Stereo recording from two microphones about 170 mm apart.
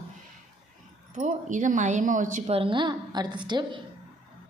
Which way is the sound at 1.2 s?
45° right (ahead or behind).